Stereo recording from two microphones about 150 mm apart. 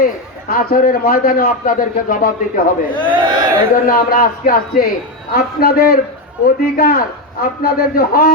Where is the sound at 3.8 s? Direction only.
75° left (ahead or behind).